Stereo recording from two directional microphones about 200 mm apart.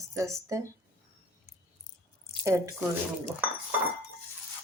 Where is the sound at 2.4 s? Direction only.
15° right (ahead or behind).